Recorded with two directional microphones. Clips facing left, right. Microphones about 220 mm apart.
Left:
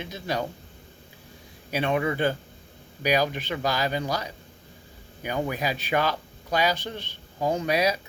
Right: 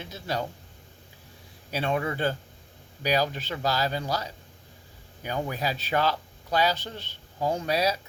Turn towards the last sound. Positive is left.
turn(degrees=15)  # may be behind; listen again after turning